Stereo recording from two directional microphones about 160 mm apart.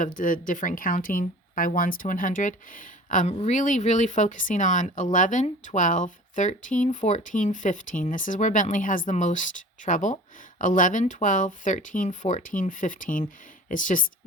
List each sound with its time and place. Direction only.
0.0 s speech: 60° left (ahead or behind)